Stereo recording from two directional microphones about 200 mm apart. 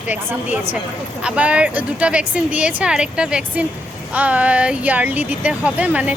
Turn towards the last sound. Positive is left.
turn(degrees=-5)  # may be behind; listen again after turning